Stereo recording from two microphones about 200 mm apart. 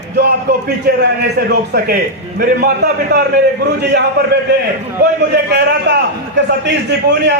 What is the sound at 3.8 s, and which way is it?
A man's voice, 55° right (ahead or behind).